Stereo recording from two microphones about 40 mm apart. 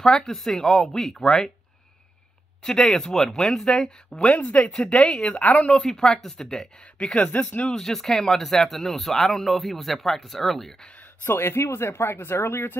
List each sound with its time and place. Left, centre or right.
0.2 s speech: centre
2.6 s speech: centre
4.2 s speech: left
4.7 s speech: centre
5.4 s speech: left
5.7 s speech: centre
11.2 s speech: left